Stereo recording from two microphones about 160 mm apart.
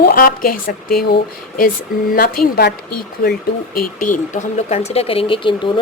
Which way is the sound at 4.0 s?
50° left (ahead or behind).